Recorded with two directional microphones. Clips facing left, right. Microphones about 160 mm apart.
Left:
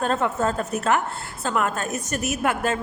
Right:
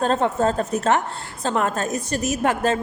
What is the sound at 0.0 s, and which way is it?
Speech, 30° right (ahead or behind).